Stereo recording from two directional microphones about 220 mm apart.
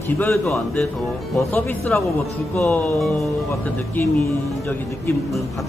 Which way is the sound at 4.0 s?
10° left (ahead or behind).